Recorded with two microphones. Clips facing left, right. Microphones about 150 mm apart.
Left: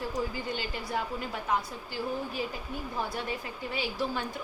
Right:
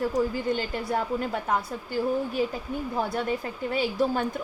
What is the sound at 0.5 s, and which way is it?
Speech, 50° right (ahead or behind).